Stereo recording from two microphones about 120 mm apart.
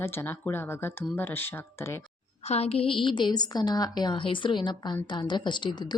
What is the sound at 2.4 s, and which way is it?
A woman's voice, 60° left (ahead or behind).